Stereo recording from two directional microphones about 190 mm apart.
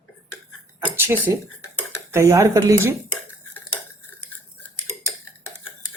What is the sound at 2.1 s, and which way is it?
Speech, 15° right (ahead or behind).